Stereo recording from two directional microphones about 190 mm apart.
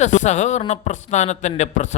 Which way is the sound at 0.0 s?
40° left (ahead or behind).